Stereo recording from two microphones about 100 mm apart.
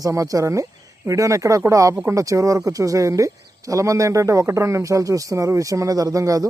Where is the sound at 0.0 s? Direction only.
35° right (ahead or behind).